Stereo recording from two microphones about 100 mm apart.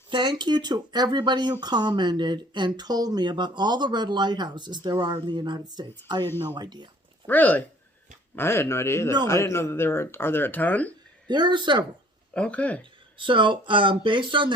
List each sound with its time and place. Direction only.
0.1 s speech: 50° right (ahead or behind)
7.3 s speech: 15° left (ahead or behind)
11.3 s speech: 50° right (ahead or behind)
12.3 s speech: 10° left (ahead or behind)
13.1 s speech: 55° right (ahead or behind)